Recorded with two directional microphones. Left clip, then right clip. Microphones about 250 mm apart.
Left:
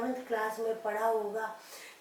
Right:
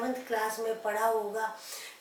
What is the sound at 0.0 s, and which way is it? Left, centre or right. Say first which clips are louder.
A woman's voice: right 2 dB; centre.